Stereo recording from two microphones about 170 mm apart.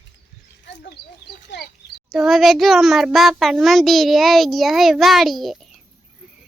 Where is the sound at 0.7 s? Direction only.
90° left.